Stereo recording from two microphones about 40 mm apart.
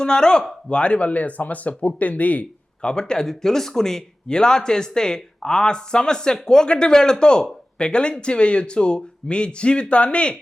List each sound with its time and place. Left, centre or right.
0.0 s speech: centre; by 2.5 s left
2.8 s speech: centre